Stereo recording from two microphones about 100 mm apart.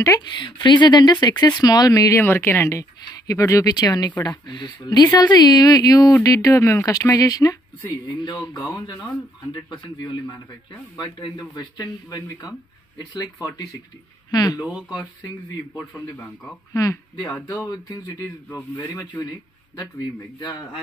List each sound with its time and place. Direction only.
0.2 s speech: 45° left (ahead or behind)
9.7 s speech: 50° left (ahead or behind)
11.3 s speech: 45° left (ahead or behind)
14.6 s speech: 10° right (ahead or behind)
15.7 s speech: 25° left (ahead or behind)
16.7 s speech: 35° left (ahead or behind)